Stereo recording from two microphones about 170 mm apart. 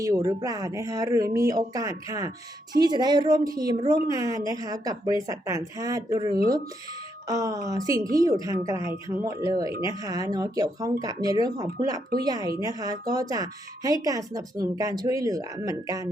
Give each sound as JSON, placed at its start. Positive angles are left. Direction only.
{"t": 0.0, "sound": "speech", "side_deg": -20}